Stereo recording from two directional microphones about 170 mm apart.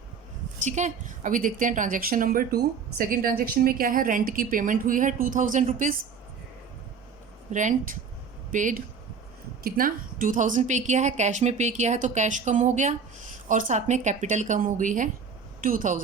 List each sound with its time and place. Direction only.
0.6 s a woman's voice: 45° right (ahead or behind)
7.5 s a woman's voice: 50° right (ahead or behind)